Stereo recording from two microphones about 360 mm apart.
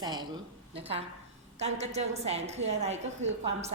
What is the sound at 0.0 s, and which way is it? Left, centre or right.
A woman's voice, centre.